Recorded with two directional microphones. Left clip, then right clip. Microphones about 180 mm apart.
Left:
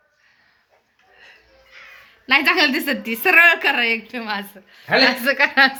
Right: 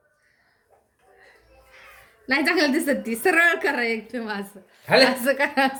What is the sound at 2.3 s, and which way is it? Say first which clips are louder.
A woman's voice: left 5 dB; 5° left (ahead or behind).